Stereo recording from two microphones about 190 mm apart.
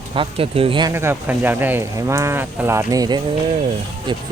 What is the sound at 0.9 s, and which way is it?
Speech, 10° right (ahead or behind).